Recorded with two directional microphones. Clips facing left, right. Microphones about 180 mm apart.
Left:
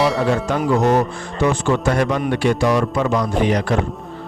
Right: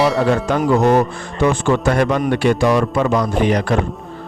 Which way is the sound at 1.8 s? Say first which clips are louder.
Right 2 dB; 60° right (ahead or behind).